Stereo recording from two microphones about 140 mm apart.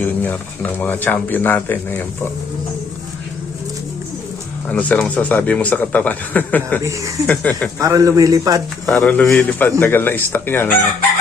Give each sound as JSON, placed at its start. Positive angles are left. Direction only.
{"t": 0.0, "sound": "speech", "side_deg": 10}
{"t": 4.7, "sound": "speech", "side_deg": 10}
{"t": 7.8, "sound": "speech", "side_deg": -25}
{"t": 8.9, "sound": "speech", "side_deg": 10}